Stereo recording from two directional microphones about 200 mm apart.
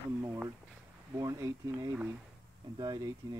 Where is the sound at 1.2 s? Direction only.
15° right (ahead or behind).